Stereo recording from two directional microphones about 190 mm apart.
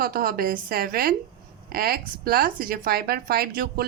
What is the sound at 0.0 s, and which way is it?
Speech, 50° right (ahead or behind).